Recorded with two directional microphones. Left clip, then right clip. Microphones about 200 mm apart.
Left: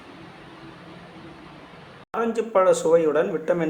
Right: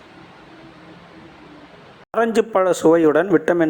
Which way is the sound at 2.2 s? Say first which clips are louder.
Right 4 dB; 45° right (ahead or behind).